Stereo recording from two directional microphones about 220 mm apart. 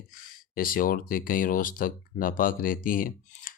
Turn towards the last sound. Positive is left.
turn(degrees=40)  # may be behind; listen again after turning